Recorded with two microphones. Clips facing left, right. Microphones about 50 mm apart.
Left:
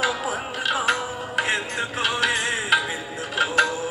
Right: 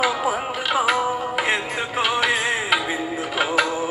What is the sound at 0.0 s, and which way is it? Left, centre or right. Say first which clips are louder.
Music: right 4 dB; centre.